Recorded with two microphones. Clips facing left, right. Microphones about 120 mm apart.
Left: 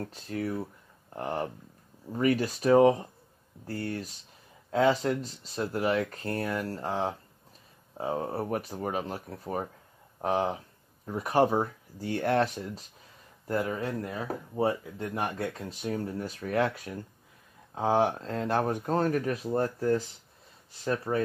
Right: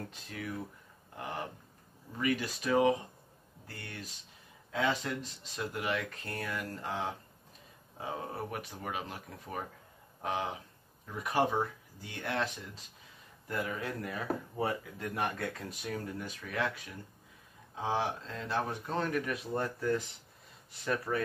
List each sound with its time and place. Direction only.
0.1 s speech: 40° left (ahead or behind)